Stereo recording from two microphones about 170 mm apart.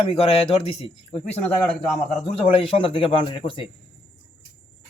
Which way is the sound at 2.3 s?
35° left (ahead or behind).